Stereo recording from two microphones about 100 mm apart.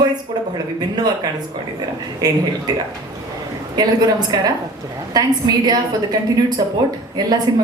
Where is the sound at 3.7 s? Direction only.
40° right (ahead or behind).